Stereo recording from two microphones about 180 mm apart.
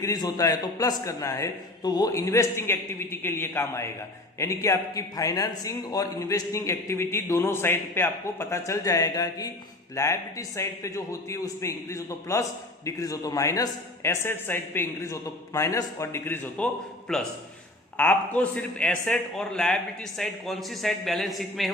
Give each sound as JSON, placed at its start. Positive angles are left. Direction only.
{"t": 0.0, "sound": "a man's voice", "side_deg": 20}